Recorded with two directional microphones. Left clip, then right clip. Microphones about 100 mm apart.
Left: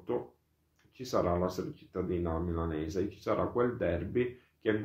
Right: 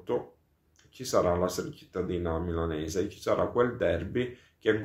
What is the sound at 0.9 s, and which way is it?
Speech, 25° right (ahead or behind).